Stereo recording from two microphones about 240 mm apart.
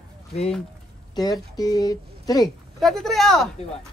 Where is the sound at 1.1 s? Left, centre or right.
Centre.